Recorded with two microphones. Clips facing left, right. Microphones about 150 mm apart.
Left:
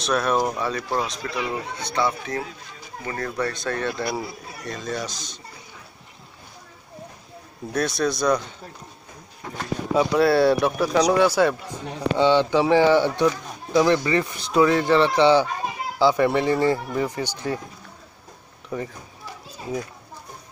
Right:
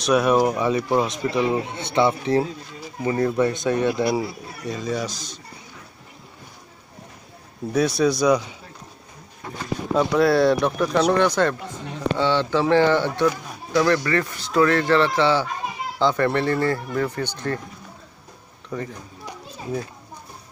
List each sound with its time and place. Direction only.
0.0 s speech: 15° right (ahead or behind)
7.7 s speech: 5° right (ahead or behind)
9.9 s speech: centre (ahead or behind)
18.7 s speech: 10° left (ahead or behind)